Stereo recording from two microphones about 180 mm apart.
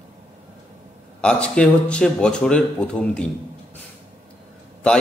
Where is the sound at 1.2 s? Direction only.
5° left (ahead or behind).